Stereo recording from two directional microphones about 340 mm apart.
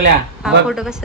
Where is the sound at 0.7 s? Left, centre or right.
Centre.